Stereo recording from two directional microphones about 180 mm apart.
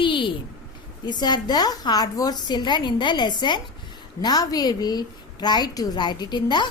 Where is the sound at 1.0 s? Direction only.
25° left (ahead or behind).